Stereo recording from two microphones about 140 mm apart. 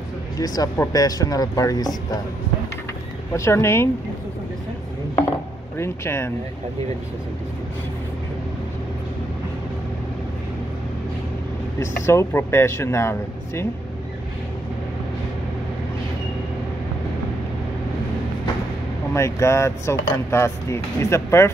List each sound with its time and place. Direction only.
0.4 s speech: 25° left (ahead or behind)
3.3 s speech: 20° left (ahead or behind)
5.8 s speech: 20° left (ahead or behind)
11.8 s speech: 20° left (ahead or behind)
19.1 s speech: 20° left (ahead or behind)